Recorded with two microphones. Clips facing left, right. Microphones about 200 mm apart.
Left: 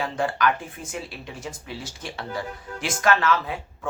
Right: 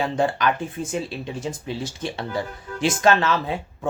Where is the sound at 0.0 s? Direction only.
25° right (ahead or behind).